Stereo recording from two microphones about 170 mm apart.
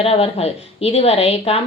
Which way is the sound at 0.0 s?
35° left (ahead or behind).